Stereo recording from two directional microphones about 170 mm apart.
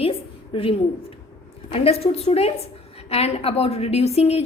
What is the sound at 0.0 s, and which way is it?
A woman's voice, 35° left (ahead or behind).